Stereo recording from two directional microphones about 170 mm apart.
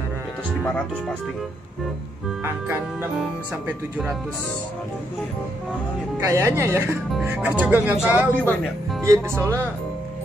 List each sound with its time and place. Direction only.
2.4 s speech: 15° right (ahead or behind)
3.2 s speech: 5° right (ahead or behind)
6.1 s speech: 15° right (ahead or behind)
7.1 s speech: 5° right (ahead or behind)